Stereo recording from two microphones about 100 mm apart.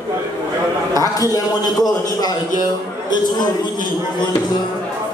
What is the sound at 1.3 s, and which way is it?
Speech, 40° left (ahead or behind).